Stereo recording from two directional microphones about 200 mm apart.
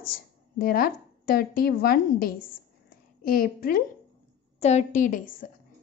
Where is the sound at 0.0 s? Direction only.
45° left (ahead or behind).